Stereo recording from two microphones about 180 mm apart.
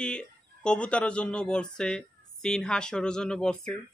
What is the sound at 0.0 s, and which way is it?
Speech, 5° left (ahead or behind).